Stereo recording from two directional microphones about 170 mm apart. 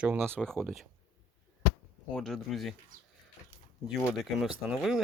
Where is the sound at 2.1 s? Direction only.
Centre (ahead or behind).